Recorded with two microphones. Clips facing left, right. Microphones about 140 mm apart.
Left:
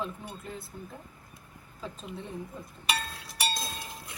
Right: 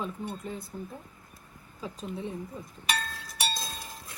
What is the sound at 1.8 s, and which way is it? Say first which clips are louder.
Cutlery: right 4 dB; centre (ahead or behind).